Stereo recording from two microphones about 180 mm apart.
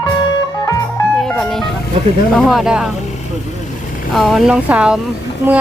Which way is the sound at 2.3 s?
Centre (ahead or behind).